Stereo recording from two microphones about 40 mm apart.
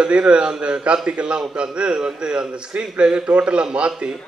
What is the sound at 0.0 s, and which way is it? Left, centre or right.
A man's voice, right.